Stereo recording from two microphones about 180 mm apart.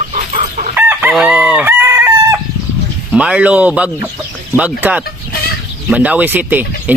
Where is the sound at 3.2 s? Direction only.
5° right (ahead or behind).